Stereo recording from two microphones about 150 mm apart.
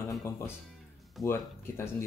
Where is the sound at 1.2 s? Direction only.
15° left (ahead or behind).